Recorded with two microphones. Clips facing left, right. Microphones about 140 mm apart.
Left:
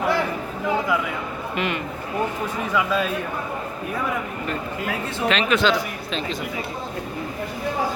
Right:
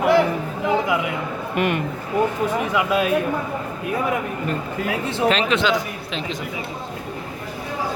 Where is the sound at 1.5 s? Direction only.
50° right (ahead or behind).